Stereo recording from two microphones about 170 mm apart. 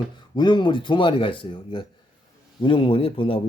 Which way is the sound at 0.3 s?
25° left (ahead or behind).